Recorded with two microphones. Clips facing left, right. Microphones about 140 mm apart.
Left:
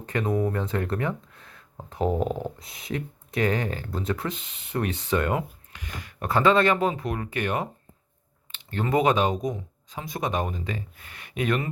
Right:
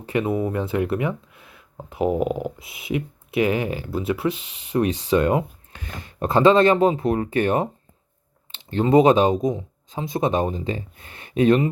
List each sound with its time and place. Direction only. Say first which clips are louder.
0.0 s speech: right 3 dB; 10° right (ahead or behind); by 11.7 s 25° right (ahead or behind)